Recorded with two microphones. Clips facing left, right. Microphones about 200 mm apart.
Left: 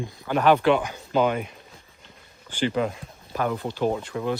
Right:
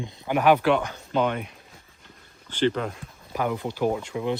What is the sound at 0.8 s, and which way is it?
Speech, 10° left (ahead or behind).